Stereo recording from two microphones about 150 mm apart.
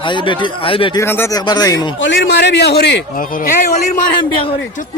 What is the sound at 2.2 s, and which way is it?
A man's voice, 90° left.